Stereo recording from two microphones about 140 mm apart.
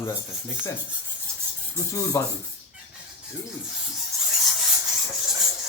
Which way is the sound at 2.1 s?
20° left (ahead or behind).